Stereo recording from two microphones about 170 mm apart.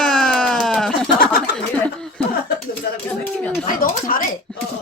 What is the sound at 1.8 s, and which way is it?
Speech, 5° left (ahead or behind).